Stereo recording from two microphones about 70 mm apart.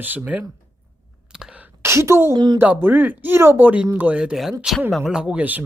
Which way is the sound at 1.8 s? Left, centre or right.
Right.